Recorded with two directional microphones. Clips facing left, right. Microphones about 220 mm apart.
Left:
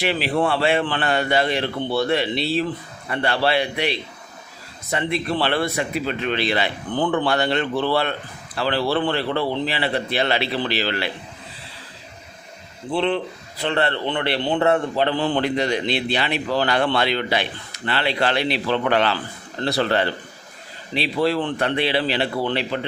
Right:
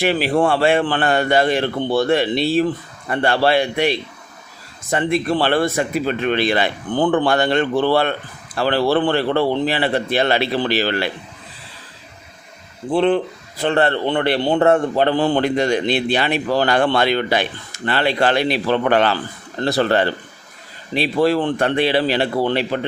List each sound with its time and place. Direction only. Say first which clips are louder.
0.0 s a man's voice: right 4 dB; 45° right (ahead or behind)
12.9 s a man's voice: right 5 dB; 45° right (ahead or behind)